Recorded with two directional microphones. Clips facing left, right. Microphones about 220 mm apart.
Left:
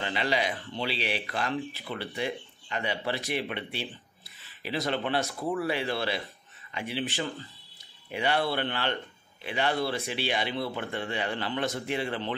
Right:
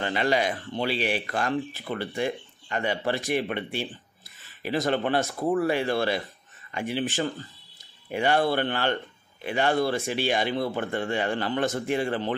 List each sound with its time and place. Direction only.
0.0 s speech: 50° right (ahead or behind)